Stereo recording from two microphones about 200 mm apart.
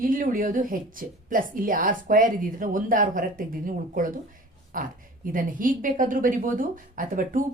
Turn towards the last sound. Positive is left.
turn(degrees=-45)  # may be behind; listen again after turning